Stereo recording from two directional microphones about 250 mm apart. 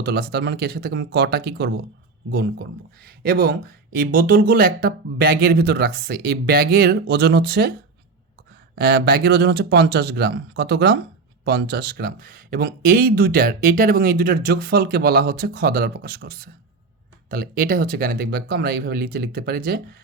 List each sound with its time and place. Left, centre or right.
0.0 s speech: right
8.7 s speech: right